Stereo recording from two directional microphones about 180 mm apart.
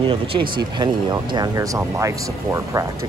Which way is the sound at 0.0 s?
30° right (ahead or behind).